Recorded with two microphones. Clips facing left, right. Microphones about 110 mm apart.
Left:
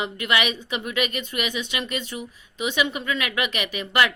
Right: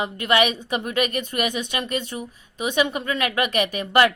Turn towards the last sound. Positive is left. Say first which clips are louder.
# right 4 dB
turn(degrees=-40)  # may be behind; listen again after turning